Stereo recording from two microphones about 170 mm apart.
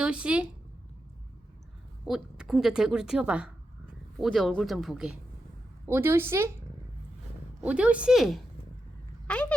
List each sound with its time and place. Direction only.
0.0 s speech: 5° right (ahead or behind)
2.0 s a woman's voice: 5° right (ahead or behind)
5.8 s a woman's voice: 15° right (ahead or behind)
7.6 s a woman's voice: 10° right (ahead or behind); by 9.6 s 5° left (ahead or behind)